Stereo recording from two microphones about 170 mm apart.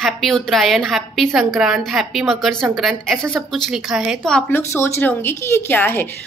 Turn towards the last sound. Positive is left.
turn(degrees=10)  # may be behind; listen again after turning